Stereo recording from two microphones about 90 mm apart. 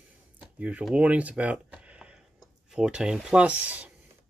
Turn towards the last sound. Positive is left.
turn(degrees=-15)  # may be behind; listen again after turning